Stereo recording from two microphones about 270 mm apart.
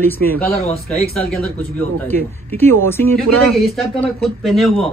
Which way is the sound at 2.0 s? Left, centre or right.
Centre.